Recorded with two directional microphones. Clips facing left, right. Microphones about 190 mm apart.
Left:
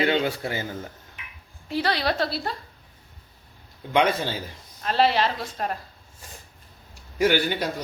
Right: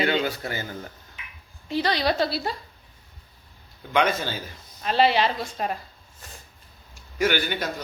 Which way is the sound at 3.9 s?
30° left (ahead or behind).